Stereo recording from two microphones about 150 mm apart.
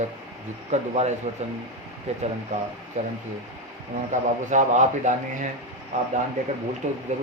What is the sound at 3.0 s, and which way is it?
A man's voice, 50° right (ahead or behind).